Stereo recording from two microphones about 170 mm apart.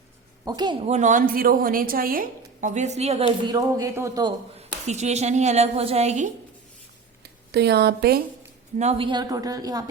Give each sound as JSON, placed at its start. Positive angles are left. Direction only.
{"t": 0.4, "sound": "a woman's voice", "side_deg": -25}
{"t": 0.9, "sound": "a woman's voice", "side_deg": -45}
{"t": 4.9, "sound": "a woman's voice", "side_deg": -40}
{"t": 7.2, "sound": "speech", "side_deg": -75}
{"t": 8.8, "sound": "a woman's voice", "side_deg": -35}